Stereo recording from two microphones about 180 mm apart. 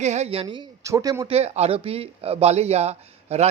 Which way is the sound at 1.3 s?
35° right (ahead or behind).